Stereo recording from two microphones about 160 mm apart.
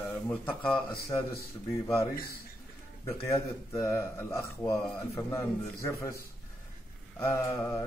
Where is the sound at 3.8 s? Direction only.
20° left (ahead or behind).